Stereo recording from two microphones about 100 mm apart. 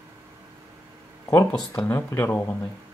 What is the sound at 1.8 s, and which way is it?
Speech, 25° left (ahead or behind).